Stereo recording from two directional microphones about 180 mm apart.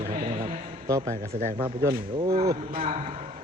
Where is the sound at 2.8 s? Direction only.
35° right (ahead or behind).